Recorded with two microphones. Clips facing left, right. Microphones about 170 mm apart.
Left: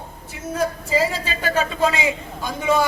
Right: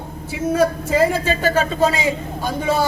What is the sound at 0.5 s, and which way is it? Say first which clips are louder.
A man's voice: right 4 dB; 60° right (ahead or behind).